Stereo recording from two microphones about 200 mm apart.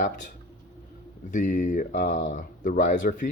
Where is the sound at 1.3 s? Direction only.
40° left (ahead or behind).